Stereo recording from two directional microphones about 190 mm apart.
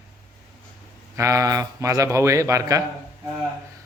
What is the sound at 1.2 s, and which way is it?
A man's voice, 15° right (ahead or behind).